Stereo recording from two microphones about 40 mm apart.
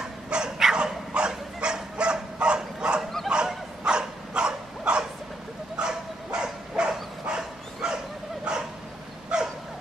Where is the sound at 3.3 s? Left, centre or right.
Right.